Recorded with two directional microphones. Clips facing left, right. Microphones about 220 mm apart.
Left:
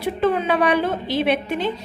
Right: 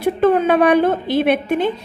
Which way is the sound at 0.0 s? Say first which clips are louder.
Right 6 dB; 50° right (ahead or behind).